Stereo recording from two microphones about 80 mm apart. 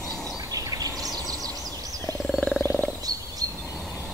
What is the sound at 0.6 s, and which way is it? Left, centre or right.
Bird, right.